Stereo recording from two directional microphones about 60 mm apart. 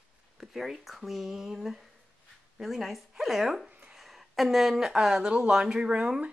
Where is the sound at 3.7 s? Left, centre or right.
Right.